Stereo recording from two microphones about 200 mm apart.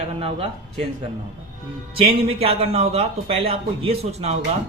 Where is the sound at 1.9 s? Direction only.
30° right (ahead or behind).